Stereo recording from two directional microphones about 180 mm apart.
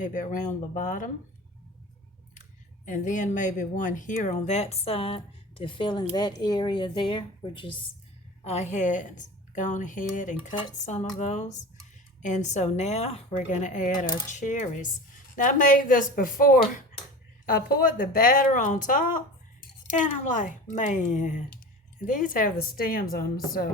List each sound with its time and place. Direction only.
0.0 s a woman's voice: 45° left (ahead or behind)
2.9 s a woman's voice: 45° left (ahead or behind); by 7.8 s 30° left (ahead or behind)
8.4 s a woman's voice: 40° left (ahead or behind); by 23.6 s 55° left (ahead or behind)